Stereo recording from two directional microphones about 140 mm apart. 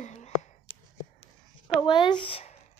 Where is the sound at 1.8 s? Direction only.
35° left (ahead or behind).